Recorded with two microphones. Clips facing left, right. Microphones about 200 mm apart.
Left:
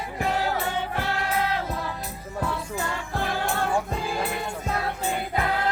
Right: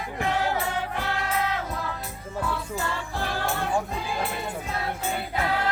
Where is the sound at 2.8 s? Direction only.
20° left (ahead or behind).